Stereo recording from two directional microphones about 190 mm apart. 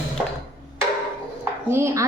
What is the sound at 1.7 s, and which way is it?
Speech, 15° right (ahead or behind).